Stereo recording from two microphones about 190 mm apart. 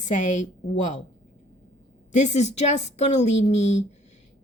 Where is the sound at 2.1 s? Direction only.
35° left (ahead or behind).